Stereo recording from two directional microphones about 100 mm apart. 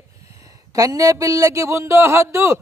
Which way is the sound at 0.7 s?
35° right (ahead or behind).